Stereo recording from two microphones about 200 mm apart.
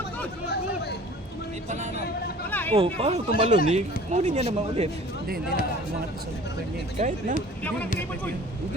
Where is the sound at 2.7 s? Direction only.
30° right (ahead or behind).